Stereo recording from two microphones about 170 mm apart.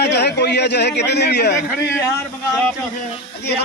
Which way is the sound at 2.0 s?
10° left (ahead or behind).